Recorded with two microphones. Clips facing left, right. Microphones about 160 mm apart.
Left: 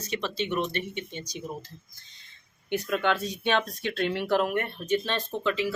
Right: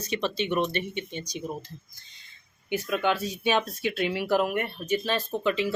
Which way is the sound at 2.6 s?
5° right (ahead or behind).